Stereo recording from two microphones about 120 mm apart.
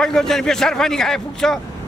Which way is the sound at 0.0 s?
5° left (ahead or behind).